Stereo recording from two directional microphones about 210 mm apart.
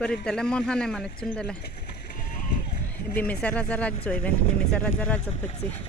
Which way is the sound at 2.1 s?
40° left (ahead or behind).